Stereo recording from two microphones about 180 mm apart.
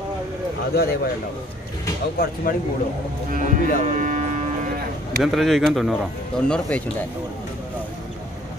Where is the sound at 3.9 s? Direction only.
40° right (ahead or behind).